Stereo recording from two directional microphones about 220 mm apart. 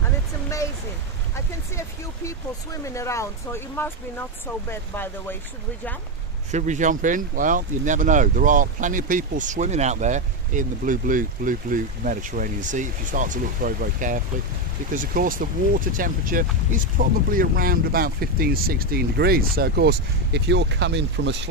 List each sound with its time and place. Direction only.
1.8 s speech: 15° left (ahead or behind)
6.5 s speech: 35° right (ahead or behind); by 21.5 s 55° right (ahead or behind)